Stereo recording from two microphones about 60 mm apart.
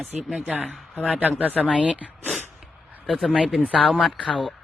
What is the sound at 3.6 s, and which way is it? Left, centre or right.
Speech, centre.